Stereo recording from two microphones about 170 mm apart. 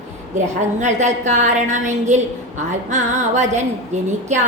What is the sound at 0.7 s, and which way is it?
A woman's voice, 45° right (ahead or behind).